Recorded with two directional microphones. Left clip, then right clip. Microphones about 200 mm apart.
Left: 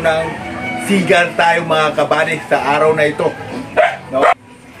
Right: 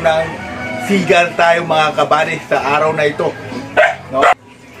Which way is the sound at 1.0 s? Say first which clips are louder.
Right 1 dB; 5° left (ahead or behind).